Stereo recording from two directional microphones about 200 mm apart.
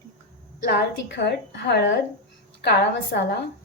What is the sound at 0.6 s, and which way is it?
A woman's voice, 55° left (ahead or behind).